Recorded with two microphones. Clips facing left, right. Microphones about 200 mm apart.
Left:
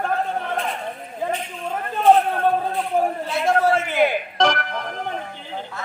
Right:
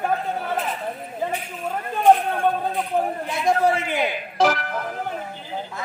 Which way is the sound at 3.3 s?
15° right (ahead or behind).